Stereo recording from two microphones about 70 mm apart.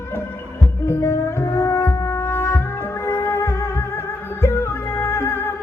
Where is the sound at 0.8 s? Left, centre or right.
Left.